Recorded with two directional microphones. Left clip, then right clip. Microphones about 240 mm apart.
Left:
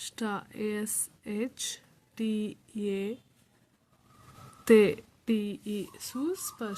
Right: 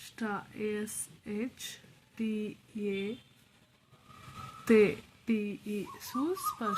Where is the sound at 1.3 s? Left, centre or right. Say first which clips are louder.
Left 4 dB; left.